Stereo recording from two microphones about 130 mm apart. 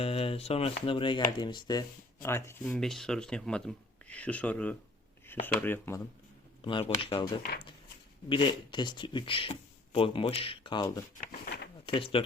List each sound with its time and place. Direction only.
0.0 s speech: 45° left (ahead or behind)
2.2 s speech: 20° left (ahead or behind)
2.6 s speech: 5° left (ahead or behind)
6.7 s speech: 40° left (ahead or behind)
8.3 s speech: 40° left (ahead or behind)
11.9 s speech: 45° left (ahead or behind)